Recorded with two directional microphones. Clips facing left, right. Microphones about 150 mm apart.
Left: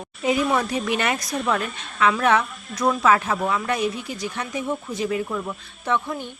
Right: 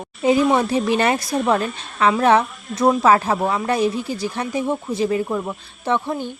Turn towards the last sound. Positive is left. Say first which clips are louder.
# right 3 dB
turn(degrees=-30)  # may be behind; listen again after turning